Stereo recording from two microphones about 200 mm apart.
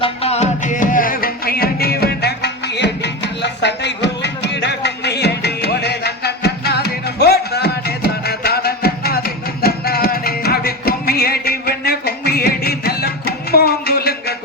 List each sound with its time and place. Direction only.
0.0 s music: 30° left (ahead or behind); by 14.3 s 50° left (ahead or behind)